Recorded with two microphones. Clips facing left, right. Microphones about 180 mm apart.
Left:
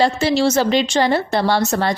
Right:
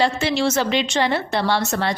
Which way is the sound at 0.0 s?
35° left (ahead or behind).